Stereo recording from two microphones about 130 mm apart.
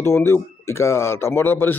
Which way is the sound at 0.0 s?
20° left (ahead or behind).